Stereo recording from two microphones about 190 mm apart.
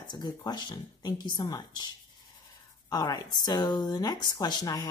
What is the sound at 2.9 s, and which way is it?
Speech, 20° left (ahead or behind).